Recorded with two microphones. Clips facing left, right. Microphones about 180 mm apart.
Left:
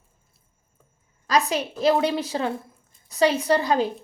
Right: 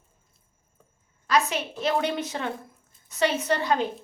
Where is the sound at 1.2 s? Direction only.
35° left (ahead or behind).